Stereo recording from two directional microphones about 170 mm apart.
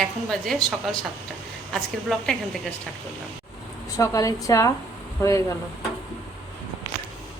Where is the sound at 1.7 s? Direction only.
5° left (ahead or behind).